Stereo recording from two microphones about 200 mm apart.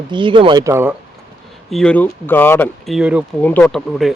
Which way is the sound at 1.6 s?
5° left (ahead or behind).